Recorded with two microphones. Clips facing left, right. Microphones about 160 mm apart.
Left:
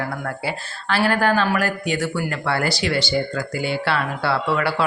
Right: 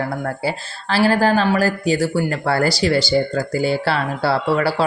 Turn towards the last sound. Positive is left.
turn(degrees=-35)  # may be behind; listen again after turning